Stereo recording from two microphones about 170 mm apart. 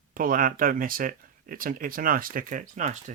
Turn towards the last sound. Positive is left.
turn(degrees=-45)  # may be behind; listen again after turning